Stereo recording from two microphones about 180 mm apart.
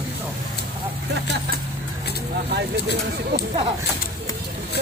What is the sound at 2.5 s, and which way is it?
Speech, 65° right (ahead or behind).